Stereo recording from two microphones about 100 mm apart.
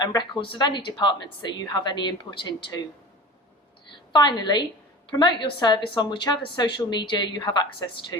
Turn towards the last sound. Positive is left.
turn(degrees=50)  # may be behind; listen again after turning